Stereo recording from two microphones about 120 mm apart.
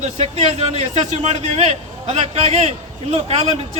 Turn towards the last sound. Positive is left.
turn(degrees=-60)  # may be behind; listen again after turning